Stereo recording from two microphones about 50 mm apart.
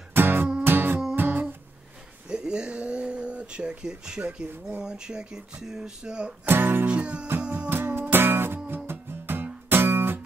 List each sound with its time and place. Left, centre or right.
0.1 s music: right
2.2 s a sound: centre
4.2 s speech: right
6.4 s music: right
6.9 s music: right
7.7 s music: right